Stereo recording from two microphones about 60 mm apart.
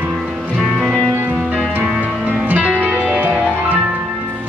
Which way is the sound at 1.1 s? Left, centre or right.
Right.